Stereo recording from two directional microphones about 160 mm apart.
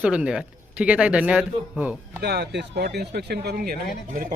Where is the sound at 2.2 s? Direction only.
90° right.